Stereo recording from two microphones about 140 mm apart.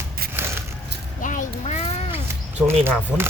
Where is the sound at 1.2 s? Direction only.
65° left (ahead or behind).